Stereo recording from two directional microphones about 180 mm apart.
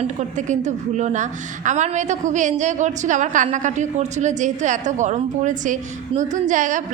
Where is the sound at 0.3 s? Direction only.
40° right (ahead or behind).